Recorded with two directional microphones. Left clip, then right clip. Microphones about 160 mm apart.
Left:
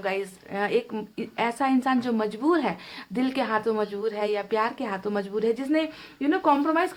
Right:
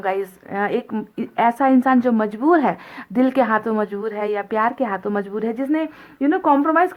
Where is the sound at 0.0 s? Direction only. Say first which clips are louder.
Right 6 dB; 35° right (ahead or behind).